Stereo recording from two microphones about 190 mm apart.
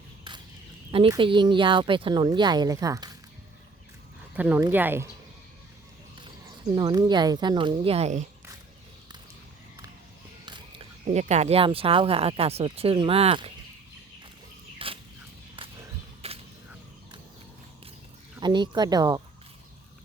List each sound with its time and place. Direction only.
0.3 s a sound: 25° right (ahead or behind)
0.9 s speech: 25° right (ahead or behind)
4.4 s speech: 10° right (ahead or behind)
6.7 s speech: 20° right (ahead or behind); by 8.3 s 35° right (ahead or behind)
10.4 s a sound: 25° right (ahead or behind)
11.0 s speech: 35° right (ahead or behind)
14.8 s a sound: 30° right (ahead or behind)
16.2 s whip: 30° right (ahead or behind)
18.3 s speech: 25° right (ahead or behind)